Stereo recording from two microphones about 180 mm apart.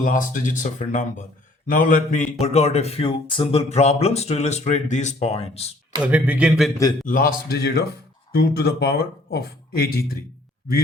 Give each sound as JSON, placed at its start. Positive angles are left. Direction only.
{"t": 0.0, "sound": "speech", "side_deg": 45}
{"t": 2.4, "sound": "speech", "side_deg": 35}
{"t": 6.0, "sound": "speech", "side_deg": -10}
{"t": 7.0, "sound": "speech", "side_deg": 50}